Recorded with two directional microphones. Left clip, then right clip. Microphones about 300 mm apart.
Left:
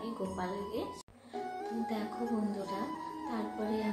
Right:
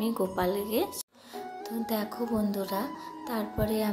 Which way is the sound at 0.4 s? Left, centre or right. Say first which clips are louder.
Right 10 dB; right.